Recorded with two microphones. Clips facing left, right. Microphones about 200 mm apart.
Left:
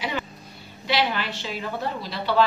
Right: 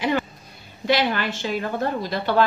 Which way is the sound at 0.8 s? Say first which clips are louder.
Right 4 dB; 50° right (ahead or behind).